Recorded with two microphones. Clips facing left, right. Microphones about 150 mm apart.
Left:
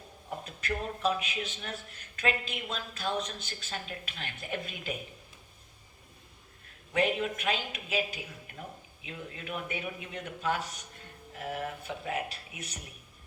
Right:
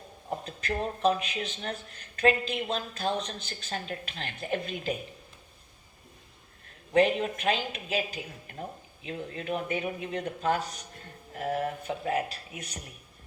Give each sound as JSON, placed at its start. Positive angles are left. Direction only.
{"t": 0.3, "sound": "a man's voice", "side_deg": -35}
{"t": 6.9, "sound": "a man's voice", "side_deg": -35}